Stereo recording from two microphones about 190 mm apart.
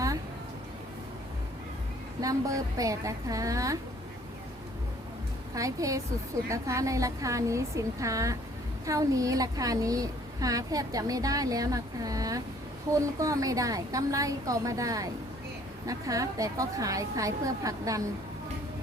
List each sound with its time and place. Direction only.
2.2 s a woman's voice: 20° right (ahead or behind)
5.5 s a woman's voice: 15° right (ahead or behind)